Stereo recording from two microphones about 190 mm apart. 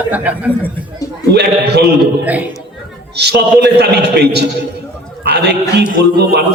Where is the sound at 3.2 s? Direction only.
60° right (ahead or behind).